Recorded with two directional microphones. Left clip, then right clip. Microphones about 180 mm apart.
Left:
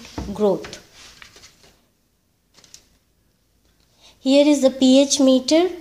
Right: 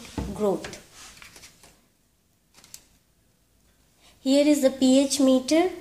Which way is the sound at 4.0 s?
35° left (ahead or behind).